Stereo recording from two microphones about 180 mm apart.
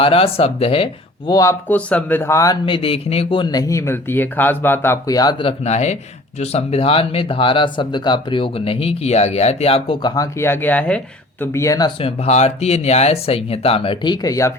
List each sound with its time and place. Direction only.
0.0 s speech: 30° left (ahead or behind)
1.3 s speech: 15° left (ahead or behind); by 10.1 s 30° left (ahead or behind)
10.2 s speech: 15° left (ahead or behind)
12.0 s speech: 35° left (ahead or behind); by 14.5 s 20° left (ahead or behind)